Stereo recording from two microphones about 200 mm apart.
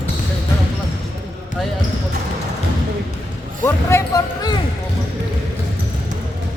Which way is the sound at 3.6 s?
15° left (ahead or behind).